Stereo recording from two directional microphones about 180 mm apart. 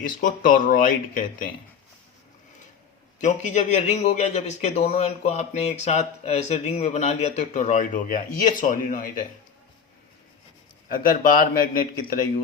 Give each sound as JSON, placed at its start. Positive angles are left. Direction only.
{"t": 0.2, "sound": "speech", "side_deg": 50}
{"t": 3.2, "sound": "speech", "side_deg": 40}
{"t": 10.8, "sound": "speech", "side_deg": 55}